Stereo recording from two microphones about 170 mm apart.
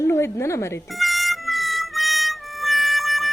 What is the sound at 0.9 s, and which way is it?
Music, centre (ahead or behind).